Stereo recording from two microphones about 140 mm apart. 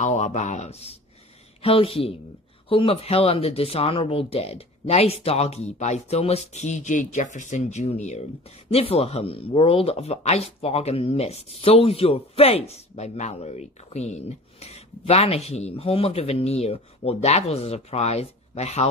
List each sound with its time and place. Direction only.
0.0 s speech: 60° left (ahead or behind)